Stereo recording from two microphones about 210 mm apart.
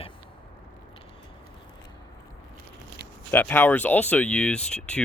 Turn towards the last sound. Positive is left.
turn(degrees=5)  # may be behind; listen again after turning